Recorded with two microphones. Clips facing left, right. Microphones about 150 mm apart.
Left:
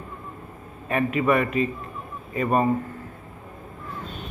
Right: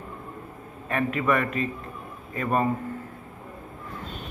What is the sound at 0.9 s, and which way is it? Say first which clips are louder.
A man's voice: left 3 dB; 10° left (ahead or behind).